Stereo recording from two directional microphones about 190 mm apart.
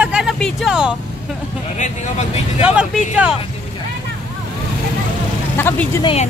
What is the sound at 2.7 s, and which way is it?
Speech, 5° right (ahead or behind).